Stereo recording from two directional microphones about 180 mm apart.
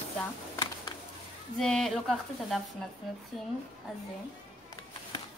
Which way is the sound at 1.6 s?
Centre (ahead or behind).